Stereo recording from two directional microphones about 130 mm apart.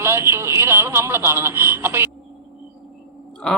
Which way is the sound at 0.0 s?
20° right (ahead or behind).